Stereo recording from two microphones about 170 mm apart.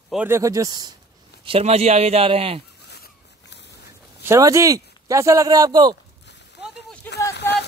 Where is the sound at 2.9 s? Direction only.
75° left (ahead or behind).